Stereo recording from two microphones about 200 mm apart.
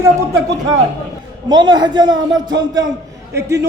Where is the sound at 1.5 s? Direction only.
20° right (ahead or behind).